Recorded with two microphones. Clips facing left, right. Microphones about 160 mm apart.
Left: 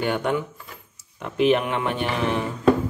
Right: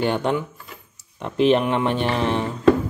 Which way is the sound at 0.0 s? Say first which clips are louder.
Right 2 dB; 30° right (ahead or behind).